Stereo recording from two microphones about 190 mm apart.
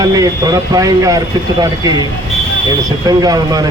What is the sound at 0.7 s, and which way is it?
Speech, 15° right (ahead or behind).